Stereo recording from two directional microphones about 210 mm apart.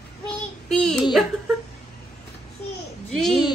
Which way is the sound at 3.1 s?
Centre (ahead or behind).